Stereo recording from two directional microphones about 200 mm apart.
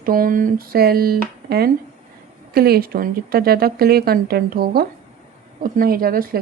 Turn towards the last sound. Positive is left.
turn(degrees=-45)  # may be behind; listen again after turning